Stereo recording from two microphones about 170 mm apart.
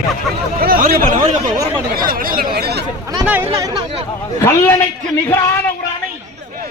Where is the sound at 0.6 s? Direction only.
60° right (ahead or behind).